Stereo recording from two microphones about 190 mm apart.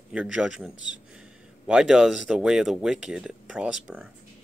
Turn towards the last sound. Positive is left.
turn(degrees=-5)  # may be behind; listen again after turning